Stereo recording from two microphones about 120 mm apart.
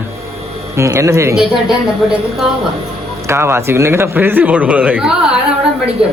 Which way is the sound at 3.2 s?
20° right (ahead or behind).